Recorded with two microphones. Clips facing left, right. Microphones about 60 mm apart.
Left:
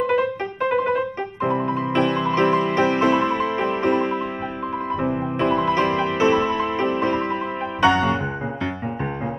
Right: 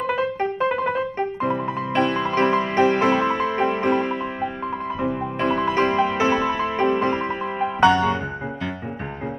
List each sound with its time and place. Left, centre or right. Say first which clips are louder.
0.7 s piano: left 2 dB; left
2.0 s music: even; right
5.4 s music: left 1 dB; right
7.8 s music: right 1 dB; left